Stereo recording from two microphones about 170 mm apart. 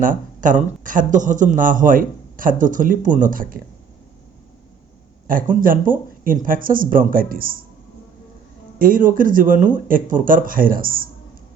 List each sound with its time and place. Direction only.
0.0 s a man's voice: 50° right (ahead or behind)
5.3 s a man's voice: 55° right (ahead or behind)
8.8 s a man's voice: 50° right (ahead or behind)